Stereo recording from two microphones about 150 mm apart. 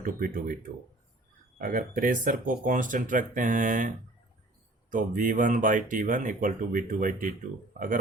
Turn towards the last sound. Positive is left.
turn(degrees=-65)  # may be behind; listen again after turning